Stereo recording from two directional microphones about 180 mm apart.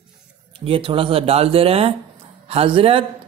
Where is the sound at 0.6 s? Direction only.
30° right (ahead or behind).